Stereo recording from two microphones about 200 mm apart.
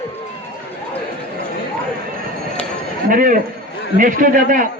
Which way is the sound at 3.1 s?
45° right (ahead or behind).